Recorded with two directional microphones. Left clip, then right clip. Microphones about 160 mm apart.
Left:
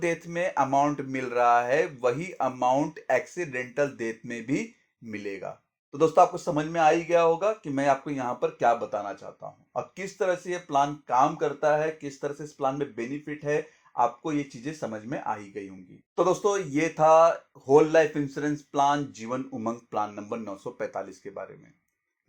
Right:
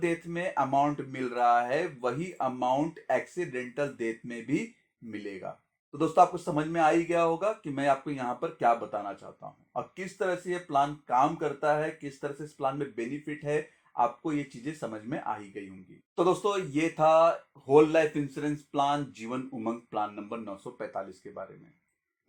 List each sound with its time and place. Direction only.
0.0 s speech: 30° left (ahead or behind)